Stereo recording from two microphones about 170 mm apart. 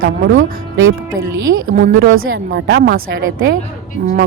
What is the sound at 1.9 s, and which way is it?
A woman's voice, 85° right.